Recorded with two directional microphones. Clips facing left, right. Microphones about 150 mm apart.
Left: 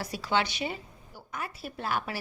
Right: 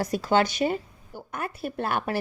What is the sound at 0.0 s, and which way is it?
A woman's voice, 45° right (ahead or behind).